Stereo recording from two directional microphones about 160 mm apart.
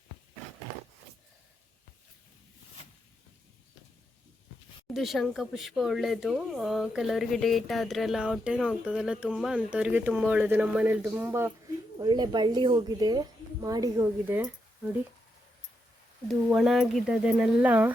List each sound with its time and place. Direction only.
4.9 s speech: centre (ahead or behind)
11.9 s a woman's voice: 25° right (ahead or behind)
16.3 s speech: centre (ahead or behind)